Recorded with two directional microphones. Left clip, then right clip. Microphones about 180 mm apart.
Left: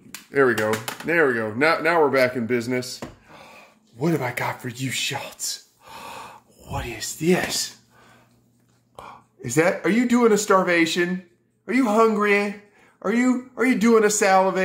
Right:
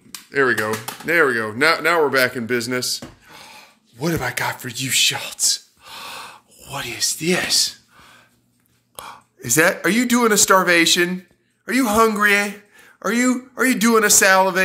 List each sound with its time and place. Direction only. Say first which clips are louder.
0.3 s speech: right 1 dB; 20° left (ahead or behind)
0.7 s speech: right 2 dB; 5° left (ahead or behind); by 7.7 s 20° left (ahead or behind)
8.9 s speech: right 4 dB; centre (ahead or behind)